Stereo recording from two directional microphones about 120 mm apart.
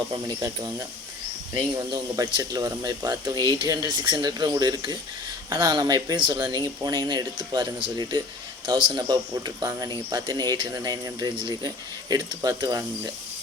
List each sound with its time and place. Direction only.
0.3 s speech: 30° right (ahead or behind)